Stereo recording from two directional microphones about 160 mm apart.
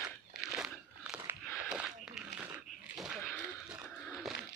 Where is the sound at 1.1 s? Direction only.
5° right (ahead or behind).